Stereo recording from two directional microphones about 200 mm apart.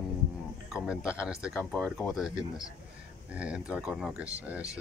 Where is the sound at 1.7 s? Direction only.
5° left (ahead or behind).